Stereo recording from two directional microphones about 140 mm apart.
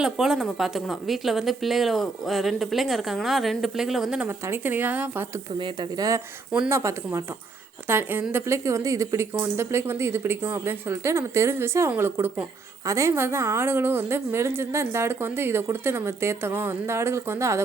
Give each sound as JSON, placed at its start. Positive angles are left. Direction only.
{"t": 0.0, "sound": "a woman's voice", "side_deg": -5}
{"t": 4.3, "sound": "speech", "side_deg": -15}
{"t": 5.5, "sound": "speech", "side_deg": -35}